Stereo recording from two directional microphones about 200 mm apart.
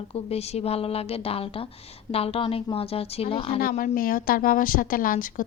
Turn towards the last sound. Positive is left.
turn(degrees=45)  # may be behind; listen again after turning